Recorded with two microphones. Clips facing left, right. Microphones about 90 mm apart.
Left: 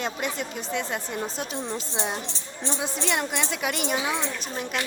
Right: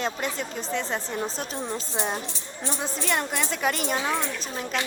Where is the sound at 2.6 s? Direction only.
45° right (ahead or behind).